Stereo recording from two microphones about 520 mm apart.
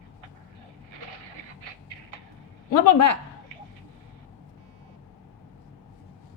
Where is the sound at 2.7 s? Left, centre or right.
Left.